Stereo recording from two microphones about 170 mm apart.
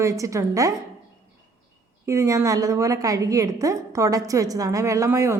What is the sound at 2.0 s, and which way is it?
A woman's voice, 15° right (ahead or behind).